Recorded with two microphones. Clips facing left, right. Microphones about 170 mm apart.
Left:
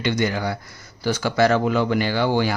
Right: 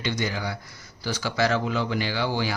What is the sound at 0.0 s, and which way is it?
Speech, 60° left (ahead or behind).